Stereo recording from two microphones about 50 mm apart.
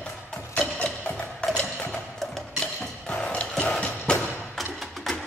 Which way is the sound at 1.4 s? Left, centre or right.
Left.